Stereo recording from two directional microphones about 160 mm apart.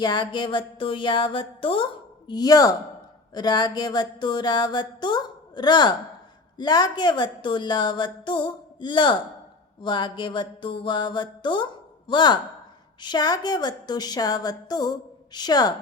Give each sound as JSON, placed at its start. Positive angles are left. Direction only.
{"t": 0.0, "sound": "a woman's voice", "side_deg": 25}